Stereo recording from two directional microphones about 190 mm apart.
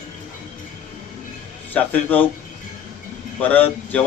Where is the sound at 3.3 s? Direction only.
10° left (ahead or behind).